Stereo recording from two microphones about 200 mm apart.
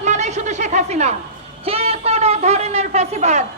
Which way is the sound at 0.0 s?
35° right (ahead or behind).